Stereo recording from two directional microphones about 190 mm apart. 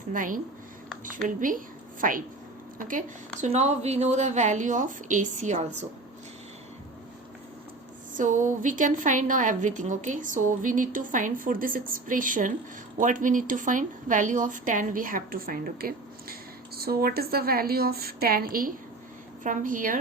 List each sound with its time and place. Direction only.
0.1 s a woman's voice: 45° right (ahead or behind)
2.0 s a woman's voice: 45° right (ahead or behind)
8.1 s a woman's voice: 40° right (ahead or behind)